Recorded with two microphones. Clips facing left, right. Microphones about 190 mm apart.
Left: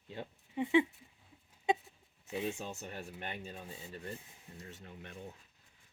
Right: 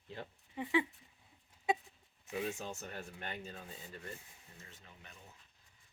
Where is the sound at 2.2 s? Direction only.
25° left (ahead or behind).